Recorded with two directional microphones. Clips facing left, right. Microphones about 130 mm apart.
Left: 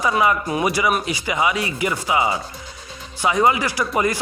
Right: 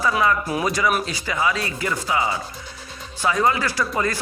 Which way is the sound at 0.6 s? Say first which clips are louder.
Left 3 dB; 10° left (ahead or behind).